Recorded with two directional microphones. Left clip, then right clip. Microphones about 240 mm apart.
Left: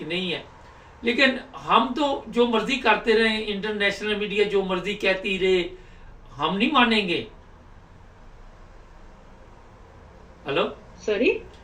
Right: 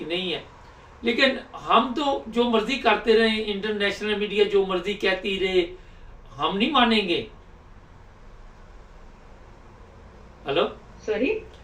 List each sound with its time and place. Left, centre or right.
1.0 s speech: centre
10.5 s speech: centre
11.1 s speech: left